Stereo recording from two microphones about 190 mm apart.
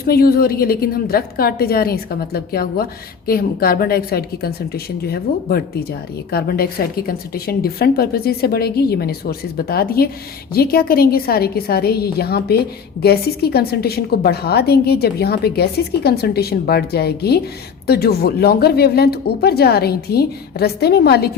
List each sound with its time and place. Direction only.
0.0 s a woman's voice: 50° left (ahead or behind)